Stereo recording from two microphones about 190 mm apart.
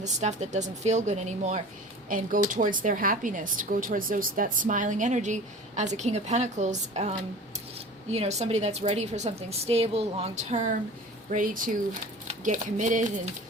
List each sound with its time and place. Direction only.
0.0 s a woman's voice: 35° right (ahead or behind)